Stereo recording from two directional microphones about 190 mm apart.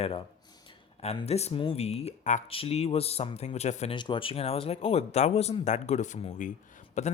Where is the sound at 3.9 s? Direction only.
25° left (ahead or behind).